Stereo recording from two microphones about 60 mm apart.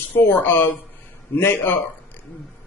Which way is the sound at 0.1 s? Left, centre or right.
Left.